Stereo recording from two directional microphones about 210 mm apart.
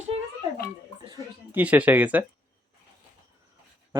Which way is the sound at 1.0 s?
15° right (ahead or behind).